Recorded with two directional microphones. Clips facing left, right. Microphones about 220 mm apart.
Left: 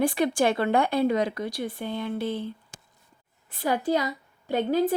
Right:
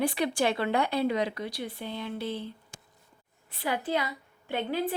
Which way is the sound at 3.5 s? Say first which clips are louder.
Left 5 dB; 45° left (ahead or behind).